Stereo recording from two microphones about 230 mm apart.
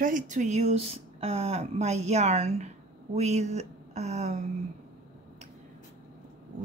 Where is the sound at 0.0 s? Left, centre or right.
Right.